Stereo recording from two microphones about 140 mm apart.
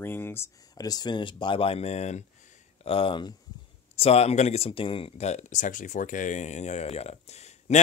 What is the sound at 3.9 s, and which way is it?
Speech, 45° left (ahead or behind).